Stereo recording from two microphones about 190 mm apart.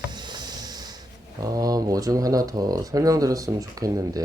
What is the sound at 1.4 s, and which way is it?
Speech, 20° right (ahead or behind).